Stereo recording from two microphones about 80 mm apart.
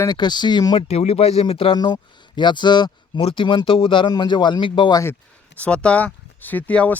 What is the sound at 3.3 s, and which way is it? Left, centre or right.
Speech, left.